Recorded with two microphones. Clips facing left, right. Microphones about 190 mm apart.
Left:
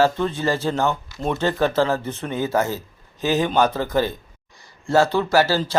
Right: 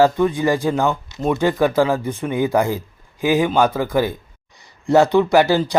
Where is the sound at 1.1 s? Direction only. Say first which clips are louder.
Right 4 dB; centre (ahead or behind).